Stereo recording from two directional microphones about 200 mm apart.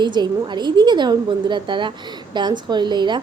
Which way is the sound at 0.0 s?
20° right (ahead or behind).